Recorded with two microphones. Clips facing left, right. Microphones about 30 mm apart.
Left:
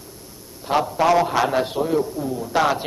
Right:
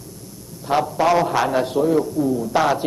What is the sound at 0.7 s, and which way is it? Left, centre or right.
A man's voice, centre.